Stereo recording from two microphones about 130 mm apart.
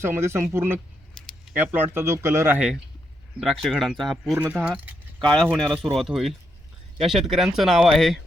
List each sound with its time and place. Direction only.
0.0 s speech: 20° right (ahead or behind)
3.4 s speech: centre (ahead or behind)
4.4 s speech: 10° right (ahead or behind)
5.2 s speech: 5° left (ahead or behind)